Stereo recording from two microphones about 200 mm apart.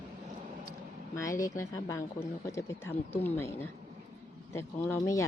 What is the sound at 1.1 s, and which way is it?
Speech, 15° left (ahead or behind).